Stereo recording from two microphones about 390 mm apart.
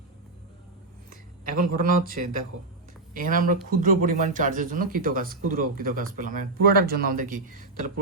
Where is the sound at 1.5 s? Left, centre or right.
Right.